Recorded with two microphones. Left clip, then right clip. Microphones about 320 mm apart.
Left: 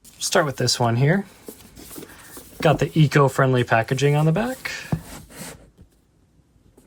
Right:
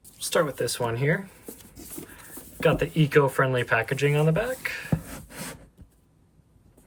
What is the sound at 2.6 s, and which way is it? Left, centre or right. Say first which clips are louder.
Speech: left 4 dB; centre.